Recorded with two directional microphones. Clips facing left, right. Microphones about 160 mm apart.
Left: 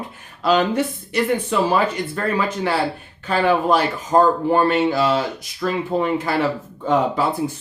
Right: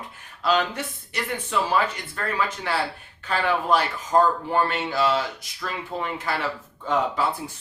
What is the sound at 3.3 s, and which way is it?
Speech, 35° left (ahead or behind).